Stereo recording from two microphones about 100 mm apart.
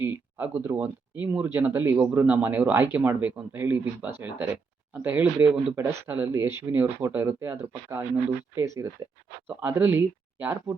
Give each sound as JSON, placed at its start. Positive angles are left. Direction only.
{"t": 0.0, "sound": "speech", "side_deg": -20}
{"t": 5.7, "sound": "speech", "side_deg": -25}
{"t": 9.5, "sound": "speech", "side_deg": -20}